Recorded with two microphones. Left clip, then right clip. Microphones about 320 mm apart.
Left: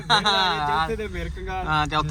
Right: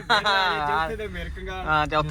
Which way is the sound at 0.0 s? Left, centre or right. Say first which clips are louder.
Left 1 dB; centre.